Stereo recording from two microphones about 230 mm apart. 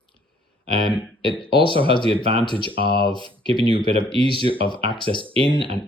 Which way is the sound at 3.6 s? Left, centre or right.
Right.